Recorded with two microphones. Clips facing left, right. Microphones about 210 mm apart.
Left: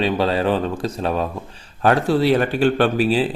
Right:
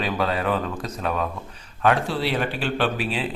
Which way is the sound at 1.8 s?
40° left (ahead or behind).